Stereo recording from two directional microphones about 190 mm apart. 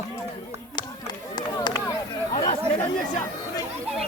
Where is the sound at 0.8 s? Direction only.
20° left (ahead or behind).